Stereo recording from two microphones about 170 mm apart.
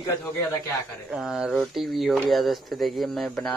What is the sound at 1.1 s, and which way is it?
A man's voice, 5° right (ahead or behind).